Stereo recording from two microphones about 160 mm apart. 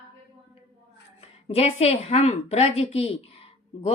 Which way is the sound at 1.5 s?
40° left (ahead or behind).